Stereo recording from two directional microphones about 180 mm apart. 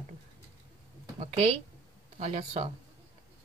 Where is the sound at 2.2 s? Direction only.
35° right (ahead or behind).